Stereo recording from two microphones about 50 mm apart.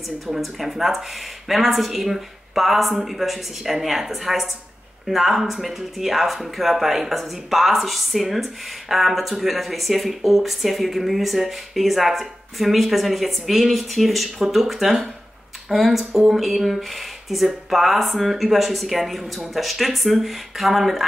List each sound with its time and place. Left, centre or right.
0.4 s speech: centre